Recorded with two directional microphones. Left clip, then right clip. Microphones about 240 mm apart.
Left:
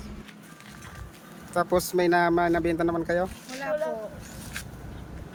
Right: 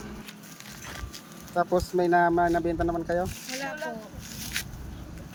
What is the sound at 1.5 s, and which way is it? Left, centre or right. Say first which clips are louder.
Speech: left 1 dB; centre.